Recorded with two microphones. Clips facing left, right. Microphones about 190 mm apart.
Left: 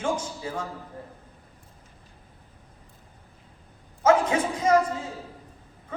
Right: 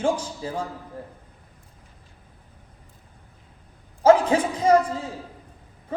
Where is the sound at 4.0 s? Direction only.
30° right (ahead or behind).